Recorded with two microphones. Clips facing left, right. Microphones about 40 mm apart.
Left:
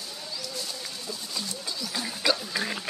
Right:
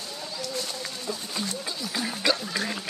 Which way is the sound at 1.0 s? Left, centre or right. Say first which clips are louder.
Right 4 dB; right.